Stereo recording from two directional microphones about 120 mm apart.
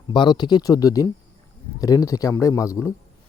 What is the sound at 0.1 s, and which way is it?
A man's voice, 40° left (ahead or behind).